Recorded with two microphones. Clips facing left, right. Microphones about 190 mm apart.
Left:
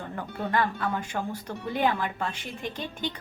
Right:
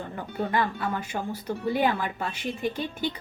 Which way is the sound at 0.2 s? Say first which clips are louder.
Right 1 dB; 10° right (ahead or behind).